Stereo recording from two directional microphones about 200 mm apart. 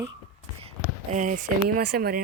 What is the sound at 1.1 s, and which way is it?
Speech, 40° right (ahead or behind).